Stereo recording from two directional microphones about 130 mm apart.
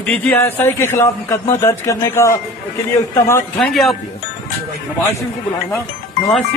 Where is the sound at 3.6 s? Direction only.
Centre (ahead or behind).